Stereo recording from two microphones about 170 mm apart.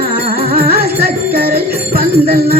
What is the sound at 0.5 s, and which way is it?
Jingle bell, 60° right (ahead or behind).